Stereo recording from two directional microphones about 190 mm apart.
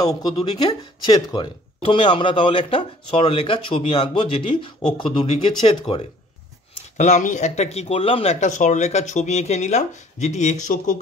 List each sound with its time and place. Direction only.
0.0 s speech: 20° left (ahead or behind)
7.0 s speech: 40° left (ahead or behind)